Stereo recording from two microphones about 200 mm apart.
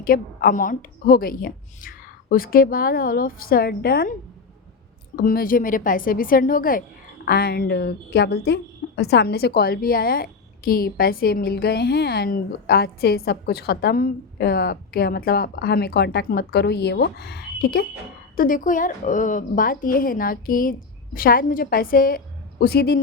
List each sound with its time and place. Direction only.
0.0 s a woman's voice: 45° left (ahead or behind)
5.1 s a woman's voice: 45° left (ahead or behind)